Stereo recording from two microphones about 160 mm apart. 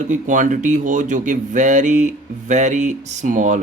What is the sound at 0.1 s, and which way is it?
Speech, 50° right (ahead or behind).